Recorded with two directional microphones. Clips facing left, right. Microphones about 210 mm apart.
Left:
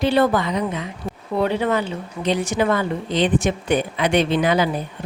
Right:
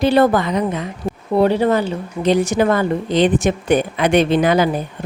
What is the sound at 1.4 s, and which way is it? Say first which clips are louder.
A woman's voice: right 5 dB; 35° right (ahead or behind).